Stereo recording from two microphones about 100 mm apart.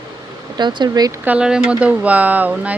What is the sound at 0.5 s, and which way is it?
Speech, 50° right (ahead or behind).